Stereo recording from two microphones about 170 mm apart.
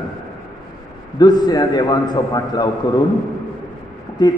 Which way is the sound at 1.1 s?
25° left (ahead or behind).